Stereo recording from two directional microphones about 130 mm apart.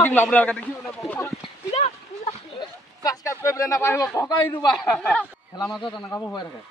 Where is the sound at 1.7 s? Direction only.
60° left (ahead or behind).